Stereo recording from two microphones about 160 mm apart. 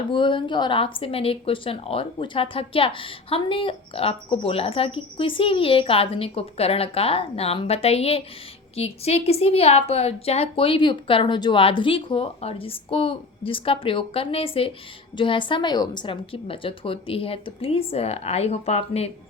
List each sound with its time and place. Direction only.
0.1 s speech: 30° left (ahead or behind)